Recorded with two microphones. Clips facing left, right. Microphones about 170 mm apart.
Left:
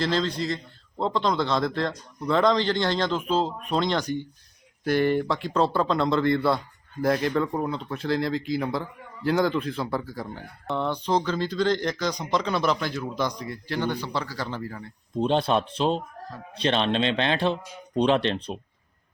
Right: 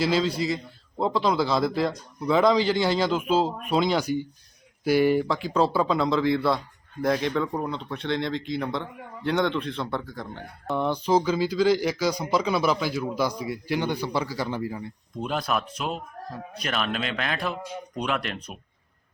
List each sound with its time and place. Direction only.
0.0 s a man's voice: 5° right (ahead or behind)
10.8 s a man's voice: 10° right (ahead or behind)
15.2 s speech: 30° left (ahead or behind)